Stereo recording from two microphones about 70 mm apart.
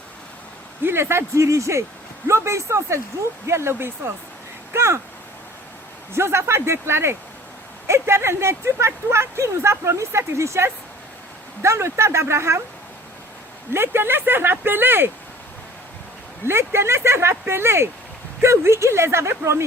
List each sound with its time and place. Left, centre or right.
0.9 s speech: right
6.1 s speech: right
13.7 s speech: right
16.5 s speech: right